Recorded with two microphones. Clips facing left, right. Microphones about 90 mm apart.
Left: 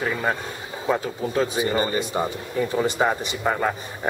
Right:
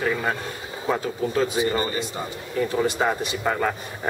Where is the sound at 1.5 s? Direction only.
15° left (ahead or behind).